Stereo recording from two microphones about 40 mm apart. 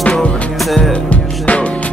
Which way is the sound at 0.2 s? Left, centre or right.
Left.